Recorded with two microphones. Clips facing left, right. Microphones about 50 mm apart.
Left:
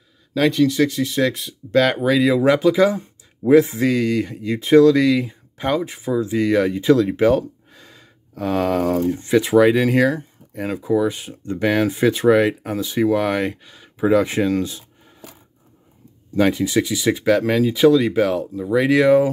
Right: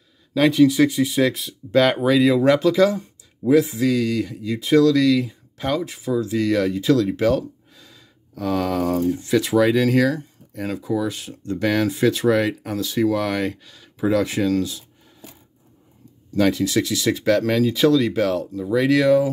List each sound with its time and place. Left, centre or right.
0.3 s speech: centre
3.4 s speech: left
7.7 s a sound: left
9.3 s speech: left
16.3 s speech: left